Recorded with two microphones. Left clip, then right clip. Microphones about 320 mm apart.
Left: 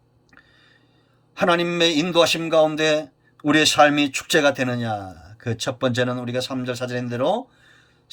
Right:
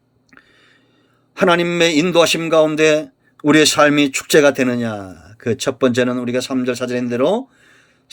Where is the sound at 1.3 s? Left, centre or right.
Centre.